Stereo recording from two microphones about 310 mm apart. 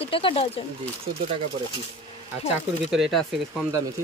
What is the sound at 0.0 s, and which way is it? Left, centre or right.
Speech, centre.